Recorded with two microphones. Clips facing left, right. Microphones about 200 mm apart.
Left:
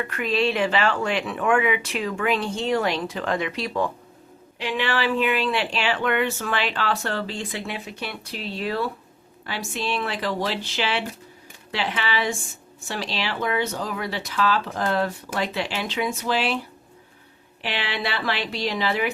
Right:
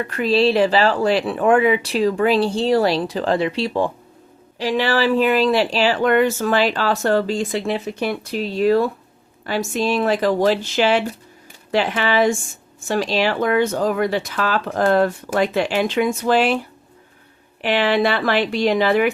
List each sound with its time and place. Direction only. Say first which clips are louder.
0.0 s speech: right 6 dB; 35° right (ahead or behind); by 16.6 s 50° right (ahead or behind)
17.6 s speech: right 11 dB; 50° right (ahead or behind)